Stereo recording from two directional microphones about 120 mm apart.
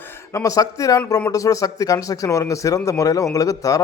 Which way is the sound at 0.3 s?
30° left (ahead or behind).